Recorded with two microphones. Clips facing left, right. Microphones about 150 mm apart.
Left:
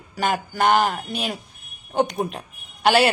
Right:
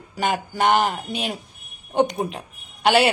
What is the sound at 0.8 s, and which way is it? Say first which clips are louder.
Speech: even; 5° left (ahead or behind).